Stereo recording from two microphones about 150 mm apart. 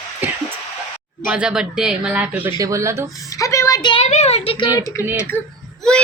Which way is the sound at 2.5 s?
20° right (ahead or behind).